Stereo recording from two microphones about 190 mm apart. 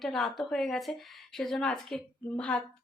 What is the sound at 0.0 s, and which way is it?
Speech, centre (ahead or behind).